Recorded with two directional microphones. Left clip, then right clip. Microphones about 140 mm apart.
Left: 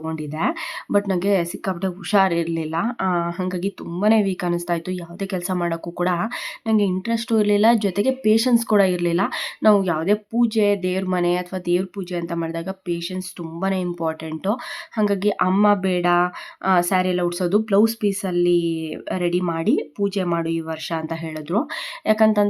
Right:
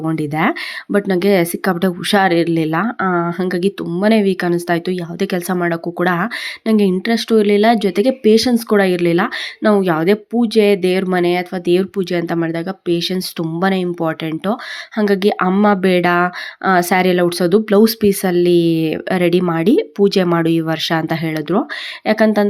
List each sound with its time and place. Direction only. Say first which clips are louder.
0.0 s speech: right 7 dB; 25° right (ahead or behind)
13.0 s speech: right 9 dB; 30° right (ahead or behind)